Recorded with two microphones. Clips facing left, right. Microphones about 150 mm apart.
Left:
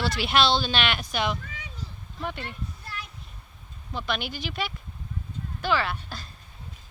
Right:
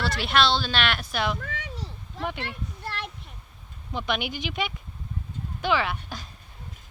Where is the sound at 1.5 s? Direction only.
75° right (ahead or behind).